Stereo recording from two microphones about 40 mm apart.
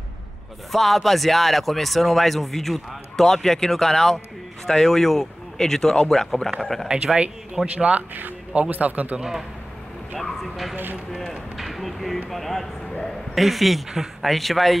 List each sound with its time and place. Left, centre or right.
0.7 s speech: centre
8.6 s a man's voice: right
10.1 s speech: centre
11.5 s a sound: centre
12.3 s speech: centre